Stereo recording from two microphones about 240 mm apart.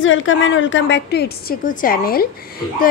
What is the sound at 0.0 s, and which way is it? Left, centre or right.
A woman's voice, left.